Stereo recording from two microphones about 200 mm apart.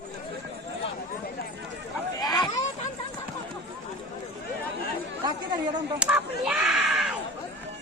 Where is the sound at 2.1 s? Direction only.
20° left (ahead or behind).